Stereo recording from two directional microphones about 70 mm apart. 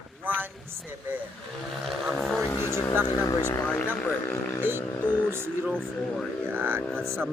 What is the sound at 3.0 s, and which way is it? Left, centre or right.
Speech, left.